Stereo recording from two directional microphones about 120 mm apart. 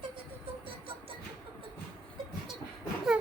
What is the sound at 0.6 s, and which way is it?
Music, 50° right (ahead or behind).